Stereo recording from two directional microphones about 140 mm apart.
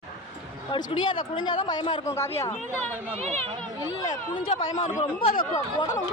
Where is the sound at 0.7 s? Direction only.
35° left (ahead or behind).